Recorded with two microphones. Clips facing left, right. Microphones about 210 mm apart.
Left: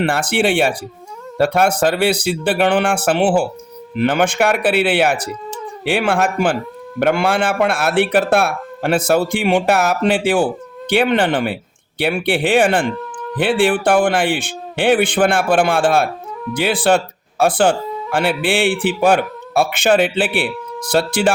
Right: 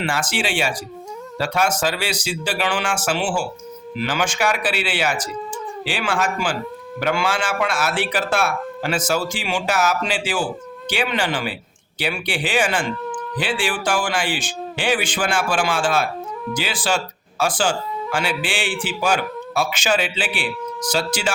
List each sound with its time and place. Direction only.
0.0 s speech: 60° left (ahead or behind)